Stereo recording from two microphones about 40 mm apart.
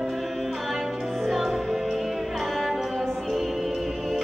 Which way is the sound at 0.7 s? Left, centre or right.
Centre.